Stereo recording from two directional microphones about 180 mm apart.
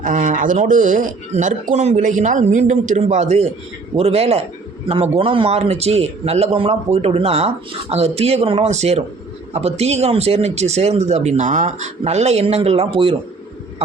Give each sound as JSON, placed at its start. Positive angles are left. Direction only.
{"t": 0.0, "sound": "speech", "side_deg": -45}